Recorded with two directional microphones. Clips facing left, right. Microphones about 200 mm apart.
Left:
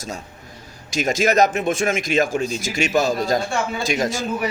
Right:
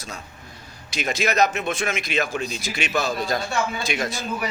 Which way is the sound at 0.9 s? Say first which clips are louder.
Left 4 dB; 45° left (ahead or behind).